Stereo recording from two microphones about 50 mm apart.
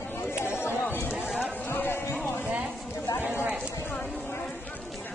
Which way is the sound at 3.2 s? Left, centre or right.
Right.